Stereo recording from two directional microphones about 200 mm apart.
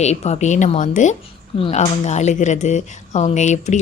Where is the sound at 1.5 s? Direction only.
25° left (ahead or behind).